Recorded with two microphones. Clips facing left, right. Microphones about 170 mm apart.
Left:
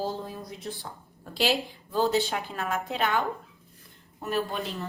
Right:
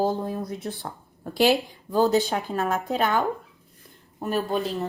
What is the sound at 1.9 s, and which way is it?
A woman's voice, 40° right (ahead or behind).